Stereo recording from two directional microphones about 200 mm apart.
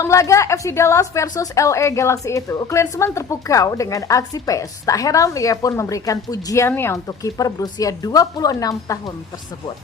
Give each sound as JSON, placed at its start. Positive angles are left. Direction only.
{"t": 0.0, "sound": "a woman's voice", "side_deg": 15}